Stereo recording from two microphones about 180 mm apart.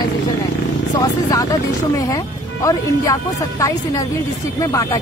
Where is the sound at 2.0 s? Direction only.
20° left (ahead or behind).